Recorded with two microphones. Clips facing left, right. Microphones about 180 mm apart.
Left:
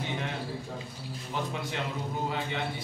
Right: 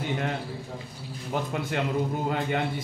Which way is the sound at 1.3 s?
50° right (ahead or behind).